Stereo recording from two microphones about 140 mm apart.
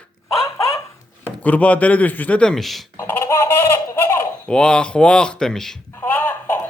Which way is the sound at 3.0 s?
20° left (ahead or behind).